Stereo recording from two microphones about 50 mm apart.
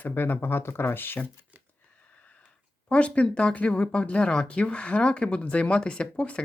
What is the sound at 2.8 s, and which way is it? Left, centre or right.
Speech, left.